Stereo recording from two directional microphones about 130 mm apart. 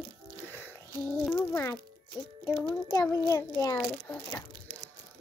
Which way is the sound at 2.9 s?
30° left (ahead or behind).